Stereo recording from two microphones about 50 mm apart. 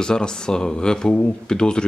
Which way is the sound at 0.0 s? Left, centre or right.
Centre.